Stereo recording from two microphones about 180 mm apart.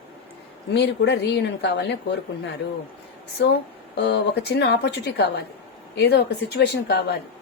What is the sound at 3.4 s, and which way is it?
Speech, 70° left (ahead or behind).